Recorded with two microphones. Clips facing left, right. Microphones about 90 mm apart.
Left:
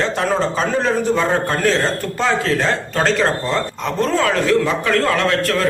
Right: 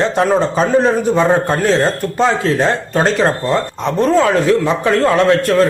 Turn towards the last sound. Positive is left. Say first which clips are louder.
# right 5 dB
turn(degrees=-25)  # may be behind; listen again after turning